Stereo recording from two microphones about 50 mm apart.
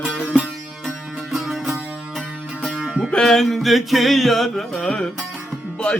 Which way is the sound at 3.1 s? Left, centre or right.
Centre.